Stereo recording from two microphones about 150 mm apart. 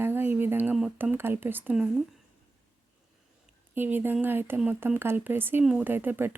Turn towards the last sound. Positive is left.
turn(degrees=-15)  # may be behind; listen again after turning